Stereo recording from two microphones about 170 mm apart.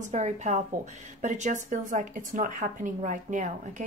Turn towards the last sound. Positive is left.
turn(degrees=-45)  # may be behind; listen again after turning